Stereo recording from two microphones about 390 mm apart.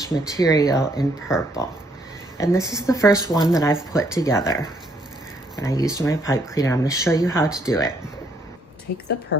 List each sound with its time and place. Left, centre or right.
0.0 s speech: centre
5.5 s speech: centre
8.9 s speech: left